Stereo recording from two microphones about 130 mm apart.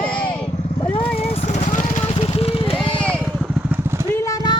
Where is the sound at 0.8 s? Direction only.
45° left (ahead or behind).